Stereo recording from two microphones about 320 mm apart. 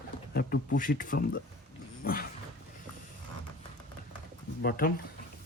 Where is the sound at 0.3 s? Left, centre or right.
Left.